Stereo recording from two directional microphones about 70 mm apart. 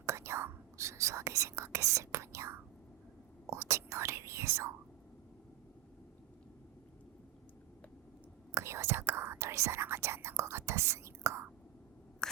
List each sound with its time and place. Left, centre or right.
0.0 s whispering: right
8.5 s whispering: right
12.2 s a sound: centre